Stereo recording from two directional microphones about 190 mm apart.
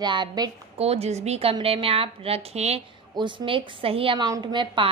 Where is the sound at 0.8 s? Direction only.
35° right (ahead or behind).